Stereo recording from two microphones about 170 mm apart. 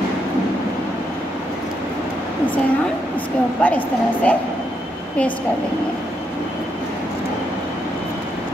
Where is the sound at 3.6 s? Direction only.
10° left (ahead or behind).